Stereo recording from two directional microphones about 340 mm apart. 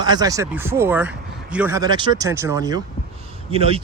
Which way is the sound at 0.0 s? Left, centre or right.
Centre.